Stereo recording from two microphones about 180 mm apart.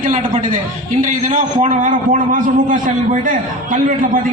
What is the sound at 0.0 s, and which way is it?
A man's voice, 45° right (ahead or behind).